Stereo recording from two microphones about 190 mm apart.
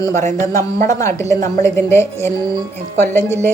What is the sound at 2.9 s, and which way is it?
Speech, 10° left (ahead or behind).